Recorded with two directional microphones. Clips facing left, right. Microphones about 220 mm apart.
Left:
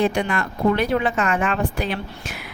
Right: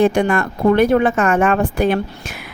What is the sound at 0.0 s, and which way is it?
Speech, 50° right (ahead or behind).